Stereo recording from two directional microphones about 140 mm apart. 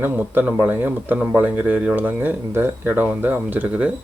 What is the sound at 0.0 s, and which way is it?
Speech, 15° right (ahead or behind).